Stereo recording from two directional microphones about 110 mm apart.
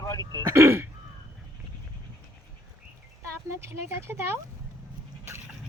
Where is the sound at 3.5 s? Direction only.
25° right (ahead or behind).